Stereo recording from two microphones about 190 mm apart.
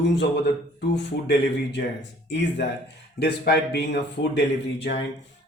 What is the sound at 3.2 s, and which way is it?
Speech, 60° left (ahead or behind).